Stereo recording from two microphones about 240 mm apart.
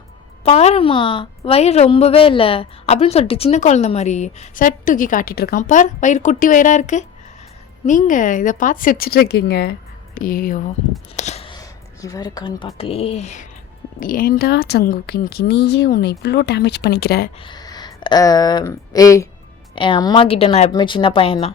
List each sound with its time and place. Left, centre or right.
0.4 s a woman's voice: left
11.2 s a sound: left
12.0 s a woman's voice: centre; by 17.3 s left
17.4 s a woman's voice: centre